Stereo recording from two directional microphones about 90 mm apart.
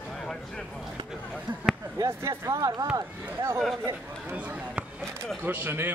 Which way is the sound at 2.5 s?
45° right (ahead or behind).